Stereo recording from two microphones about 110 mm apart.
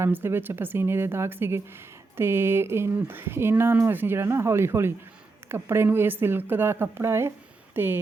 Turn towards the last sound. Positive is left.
turn(degrees=-20)  # may be behind; listen again after turning